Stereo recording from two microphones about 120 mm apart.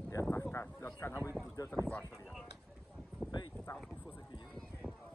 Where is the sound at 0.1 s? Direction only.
25° left (ahead or behind).